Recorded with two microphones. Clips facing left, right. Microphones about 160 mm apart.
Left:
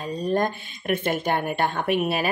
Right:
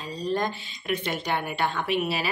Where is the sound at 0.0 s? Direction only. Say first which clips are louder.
Left 4 dB; 55° left (ahead or behind).